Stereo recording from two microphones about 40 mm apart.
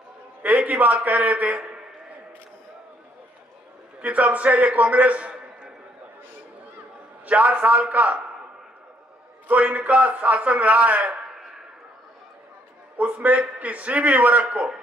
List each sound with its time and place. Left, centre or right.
0.4 s a man's voice: right
4.0 s a man's voice: right
7.2 s a man's voice: right
9.5 s a man's voice: right
13.0 s a man's voice: right